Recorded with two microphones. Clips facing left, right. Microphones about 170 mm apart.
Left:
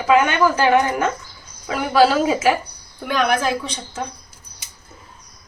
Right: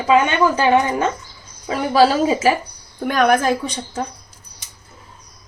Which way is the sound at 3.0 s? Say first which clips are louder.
Right 4 dB; 45° right (ahead or behind).